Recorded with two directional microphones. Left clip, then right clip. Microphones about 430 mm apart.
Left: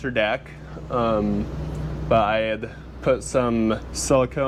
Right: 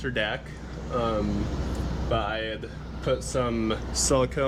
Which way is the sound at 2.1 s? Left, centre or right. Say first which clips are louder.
Left 9 dB; left.